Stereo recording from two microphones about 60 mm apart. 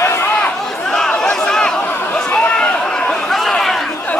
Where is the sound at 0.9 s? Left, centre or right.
Centre.